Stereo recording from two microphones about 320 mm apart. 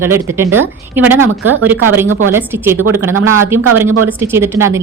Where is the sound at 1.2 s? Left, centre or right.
Right.